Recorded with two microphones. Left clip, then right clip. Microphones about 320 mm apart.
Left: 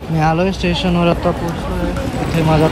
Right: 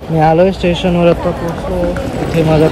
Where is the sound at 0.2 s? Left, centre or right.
Left.